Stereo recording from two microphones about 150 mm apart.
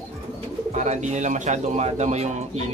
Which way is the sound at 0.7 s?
50° right (ahead or behind).